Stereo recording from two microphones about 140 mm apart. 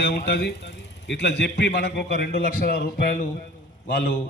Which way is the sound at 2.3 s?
90° left.